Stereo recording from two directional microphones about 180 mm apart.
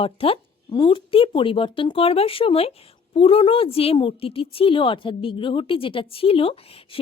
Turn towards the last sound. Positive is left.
turn(degrees=30)  # may be behind; listen again after turning